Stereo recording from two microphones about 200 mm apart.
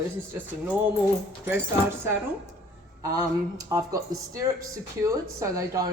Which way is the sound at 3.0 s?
15° right (ahead or behind).